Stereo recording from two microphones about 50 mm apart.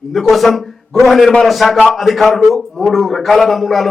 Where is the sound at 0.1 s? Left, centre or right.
Centre.